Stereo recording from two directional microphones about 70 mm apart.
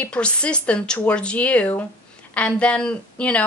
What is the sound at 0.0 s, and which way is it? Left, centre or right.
A woman's voice, centre.